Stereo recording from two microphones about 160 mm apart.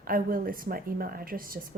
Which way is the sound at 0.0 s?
65° right (ahead or behind).